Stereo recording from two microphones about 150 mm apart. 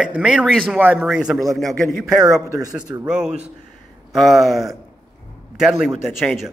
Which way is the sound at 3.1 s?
5° right (ahead or behind).